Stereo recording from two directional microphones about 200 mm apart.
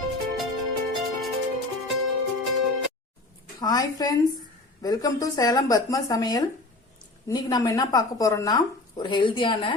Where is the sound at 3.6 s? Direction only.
20° left (ahead or behind).